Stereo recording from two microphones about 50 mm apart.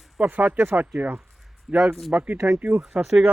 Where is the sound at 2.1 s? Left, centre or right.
Right.